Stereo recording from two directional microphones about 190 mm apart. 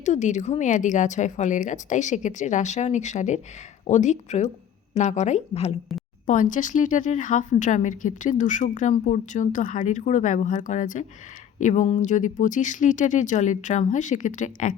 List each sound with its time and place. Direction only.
0.0 s a woman's voice: 40° left (ahead or behind)